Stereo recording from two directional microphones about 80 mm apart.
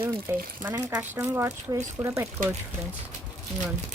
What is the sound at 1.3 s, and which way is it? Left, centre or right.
Speech, right.